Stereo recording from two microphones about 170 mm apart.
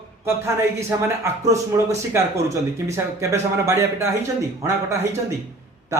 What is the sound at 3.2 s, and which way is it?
A man's voice, 15° right (ahead or behind).